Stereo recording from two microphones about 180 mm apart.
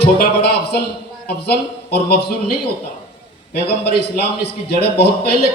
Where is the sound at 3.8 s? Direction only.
65° left (ahead or behind).